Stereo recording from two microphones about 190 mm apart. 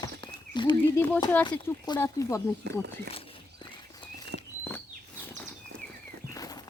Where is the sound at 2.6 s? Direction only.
60° right (ahead or behind).